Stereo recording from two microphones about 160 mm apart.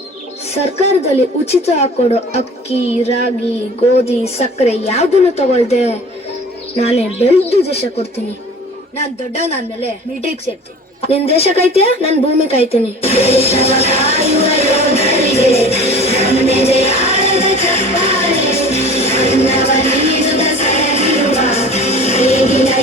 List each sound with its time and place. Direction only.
0.5 s a woman's voice: 40° left (ahead or behind)
11.0 s speech: 40° left (ahead or behind)
18.3 s music: 40° right (ahead or behind)
18.9 s music: 40° left (ahead or behind)